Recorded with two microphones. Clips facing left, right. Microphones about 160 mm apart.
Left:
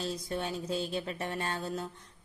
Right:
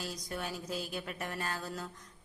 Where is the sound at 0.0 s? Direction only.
25° left (ahead or behind).